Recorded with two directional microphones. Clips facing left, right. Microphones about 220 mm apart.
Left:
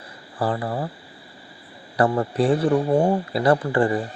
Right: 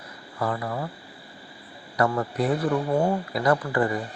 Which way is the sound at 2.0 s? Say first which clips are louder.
Left 4 dB; 30° left (ahead or behind).